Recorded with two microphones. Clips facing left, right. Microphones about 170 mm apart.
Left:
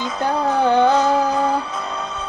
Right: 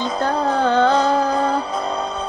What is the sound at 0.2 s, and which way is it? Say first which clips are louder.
Music: left 1 dB; 15° left (ahead or behind).